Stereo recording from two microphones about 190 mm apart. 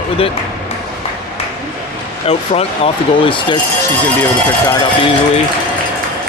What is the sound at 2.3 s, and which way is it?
Speech, 30° left (ahead or behind).